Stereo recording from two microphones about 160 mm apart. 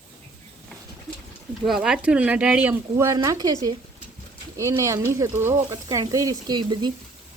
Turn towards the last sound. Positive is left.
turn(degrees=-30)  # may be behind; listen again after turning